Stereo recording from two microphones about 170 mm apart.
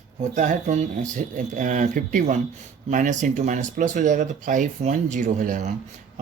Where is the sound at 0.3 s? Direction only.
45° right (ahead or behind).